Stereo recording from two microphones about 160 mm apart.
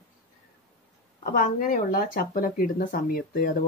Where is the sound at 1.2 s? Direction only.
60° left (ahead or behind).